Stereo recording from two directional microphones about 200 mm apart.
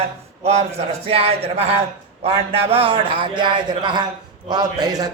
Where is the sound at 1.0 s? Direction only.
30° right (ahead or behind).